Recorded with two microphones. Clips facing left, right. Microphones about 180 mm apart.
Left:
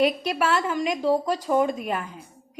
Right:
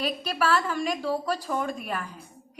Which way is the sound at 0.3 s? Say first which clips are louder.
Left 2 dB; 20° left (ahead or behind).